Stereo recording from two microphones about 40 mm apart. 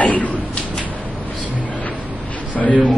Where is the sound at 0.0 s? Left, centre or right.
Left.